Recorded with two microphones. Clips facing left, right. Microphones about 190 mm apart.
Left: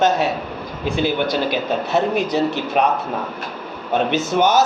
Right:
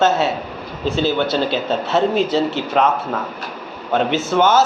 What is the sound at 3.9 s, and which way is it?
Speech, 15° left (ahead or behind).